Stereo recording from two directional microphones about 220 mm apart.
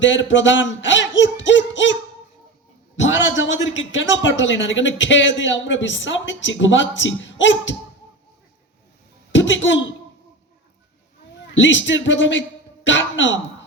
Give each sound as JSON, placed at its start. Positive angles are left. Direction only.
{"t": 0.0, "sound": "a man's voice", "side_deg": 55}
{"t": 9.3, "sound": "a woman's voice", "side_deg": 55}
{"t": 11.5, "sound": "a man's voice", "side_deg": 60}